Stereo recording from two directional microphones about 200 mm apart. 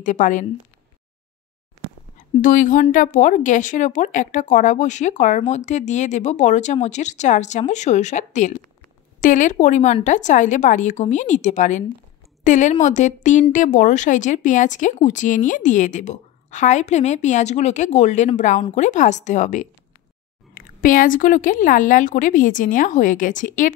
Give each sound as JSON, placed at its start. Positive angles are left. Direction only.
{"t": 0.0, "sound": "a woman's voice", "side_deg": 40}
{"t": 2.4, "sound": "a woman's voice", "side_deg": 40}